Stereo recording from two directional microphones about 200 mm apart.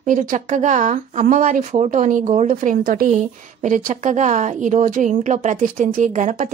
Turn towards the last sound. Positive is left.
turn(degrees=-40)  # may be behind; listen again after turning